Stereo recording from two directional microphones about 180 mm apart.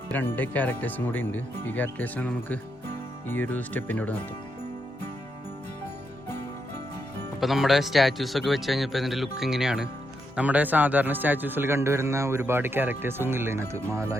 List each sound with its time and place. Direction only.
0.1 s speech: 10° left (ahead or behind)
7.3 s a man's voice: centre (ahead or behind)